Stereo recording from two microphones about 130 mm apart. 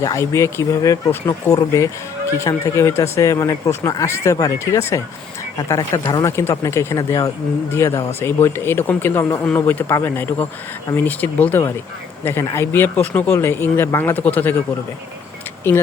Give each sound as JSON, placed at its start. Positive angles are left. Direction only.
{"t": 0.0, "sound": "speech", "side_deg": 25}